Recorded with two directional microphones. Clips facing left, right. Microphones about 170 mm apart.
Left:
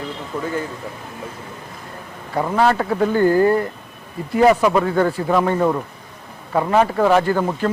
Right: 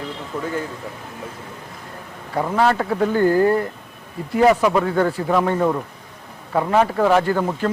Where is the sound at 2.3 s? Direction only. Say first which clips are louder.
Left 1 dB; 20° left (ahead or behind).